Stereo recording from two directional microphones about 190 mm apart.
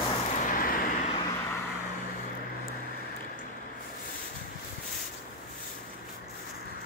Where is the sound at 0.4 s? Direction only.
45° left (ahead or behind).